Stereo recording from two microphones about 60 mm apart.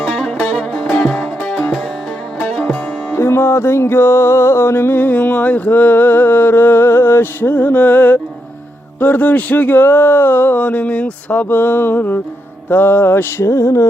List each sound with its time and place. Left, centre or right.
0.5 s music: centre
2.6 s music: left
9.0 s speech: left
13.4 s speech: left